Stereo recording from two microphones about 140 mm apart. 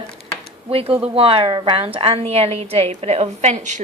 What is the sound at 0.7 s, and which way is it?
A woman's voice, 45° right (ahead or behind).